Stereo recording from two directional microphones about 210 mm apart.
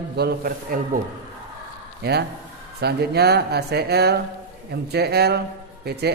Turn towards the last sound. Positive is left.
turn(degrees=-50)  # may be behind; listen again after turning